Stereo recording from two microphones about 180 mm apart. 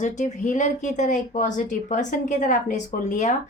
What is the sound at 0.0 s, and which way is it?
Speech, 45° left (ahead or behind).